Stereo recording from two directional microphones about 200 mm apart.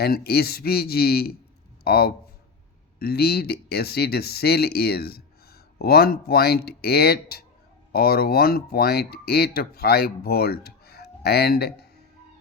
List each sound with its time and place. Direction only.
0.0 s speech: 50° left (ahead or behind)